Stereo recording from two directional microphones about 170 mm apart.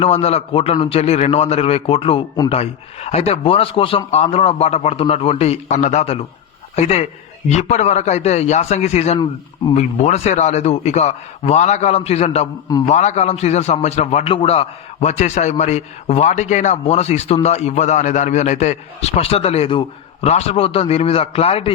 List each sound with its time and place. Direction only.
0.0 s a man's voice: 35° left (ahead or behind)